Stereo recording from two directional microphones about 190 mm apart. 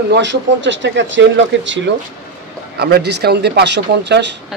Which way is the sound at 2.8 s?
60° right (ahead or behind).